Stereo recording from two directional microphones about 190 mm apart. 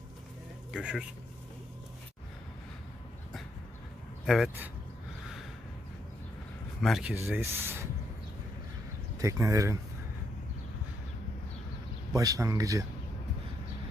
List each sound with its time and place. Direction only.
0.7 s speech: 5° right (ahead or behind)
4.3 s speech: centre (ahead or behind)
6.8 s speech: centre (ahead or behind)
7.3 s speech: 10° right (ahead or behind)
9.1 s speech: 15° right (ahead or behind)
12.1 s speech: 15° right (ahead or behind)